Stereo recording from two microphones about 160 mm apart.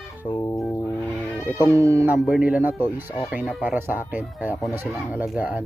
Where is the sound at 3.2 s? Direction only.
Centre (ahead or behind).